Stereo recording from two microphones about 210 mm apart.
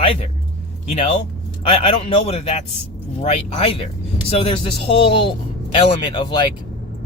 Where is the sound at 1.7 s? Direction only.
25° left (ahead or behind).